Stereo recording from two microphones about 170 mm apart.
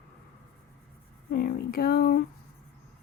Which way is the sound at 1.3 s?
65° left (ahead or behind).